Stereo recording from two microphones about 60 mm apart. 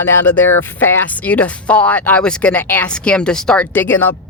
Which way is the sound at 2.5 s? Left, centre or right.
Left.